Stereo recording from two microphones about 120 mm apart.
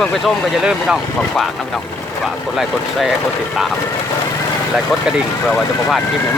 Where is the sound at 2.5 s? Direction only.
Centre (ahead or behind).